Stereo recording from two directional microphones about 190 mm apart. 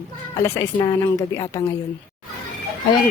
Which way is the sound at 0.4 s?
15° left (ahead or behind).